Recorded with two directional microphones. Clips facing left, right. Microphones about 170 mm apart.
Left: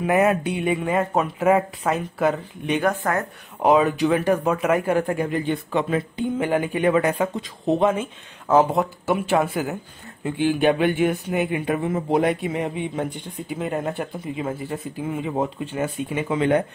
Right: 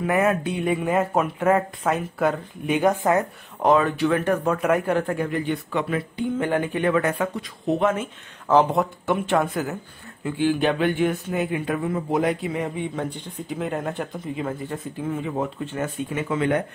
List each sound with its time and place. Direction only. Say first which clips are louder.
0.0 s a sound: left 2 dB; 20° left (ahead or behind)
0.6 s speech: even; centre (ahead or behind)
2.8 s speech: right 5 dB; 15° right (ahead or behind)
3.6 s speech: left 1 dB; 15° left (ahead or behind)
6.4 s speech: left 2 dB; 10° left (ahead or behind)
8.5 s speech: left 1 dB; 5° left (ahead or behind)
10.2 s speech: left 2 dB; 20° left (ahead or behind)
13.5 s speech: left 1 dB; 5° left (ahead or behind); by 16.6 s 20° left (ahead or behind)